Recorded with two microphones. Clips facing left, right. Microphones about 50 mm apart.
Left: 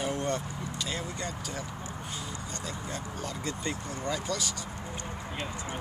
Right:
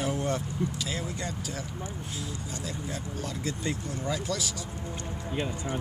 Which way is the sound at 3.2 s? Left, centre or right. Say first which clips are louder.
Right 2 dB; centre.